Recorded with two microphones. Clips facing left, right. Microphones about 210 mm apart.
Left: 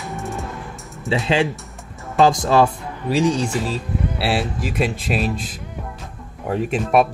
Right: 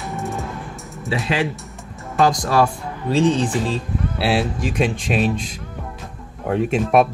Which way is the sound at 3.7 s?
Centre (ahead or behind).